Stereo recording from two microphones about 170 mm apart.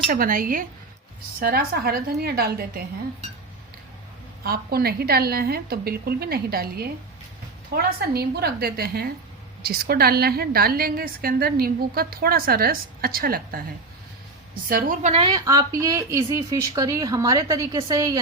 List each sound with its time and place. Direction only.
0.1 s a woman's voice: 55° right (ahead or behind)
4.4 s a woman's voice: 65° right (ahead or behind)
14.7 s a woman's voice: 55° right (ahead or behind)
15.1 s a woman's voice: 30° right (ahead or behind)
15.4 s a woman's voice: 20° right (ahead or behind)